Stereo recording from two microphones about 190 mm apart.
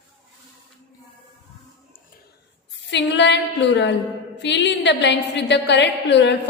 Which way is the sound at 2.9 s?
65° left (ahead or behind).